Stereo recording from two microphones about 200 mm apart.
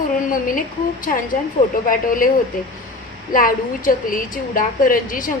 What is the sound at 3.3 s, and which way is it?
A woman's voice, 45° left (ahead or behind).